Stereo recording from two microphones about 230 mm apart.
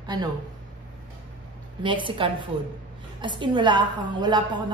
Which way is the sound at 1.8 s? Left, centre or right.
Right.